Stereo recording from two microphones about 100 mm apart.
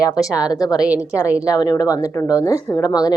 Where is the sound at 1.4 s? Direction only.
45° left (ahead or behind).